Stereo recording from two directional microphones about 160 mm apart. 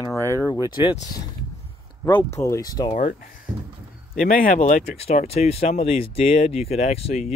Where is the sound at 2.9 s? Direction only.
50° left (ahead or behind).